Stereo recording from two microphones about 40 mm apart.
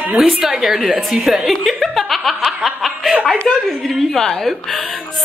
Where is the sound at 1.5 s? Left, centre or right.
Centre.